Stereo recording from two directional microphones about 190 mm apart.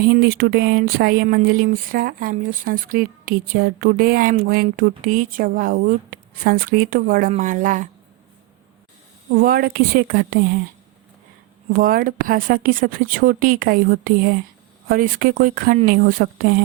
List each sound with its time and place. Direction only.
0.0 s speech: 50° right (ahead or behind)
9.3 s speech: 50° right (ahead or behind)
11.7 s speech: 50° right (ahead or behind)